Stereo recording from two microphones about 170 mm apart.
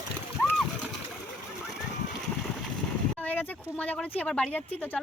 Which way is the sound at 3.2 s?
10° left (ahead or behind).